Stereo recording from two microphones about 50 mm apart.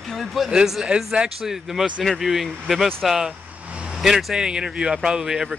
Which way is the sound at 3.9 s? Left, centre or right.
Centre.